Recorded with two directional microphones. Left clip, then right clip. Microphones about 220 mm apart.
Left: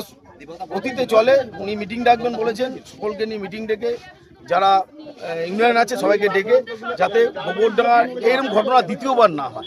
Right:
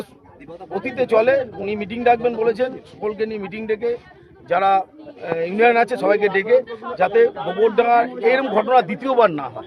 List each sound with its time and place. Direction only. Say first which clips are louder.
0.9 s speech: left 1 dB; 5° left (ahead or behind)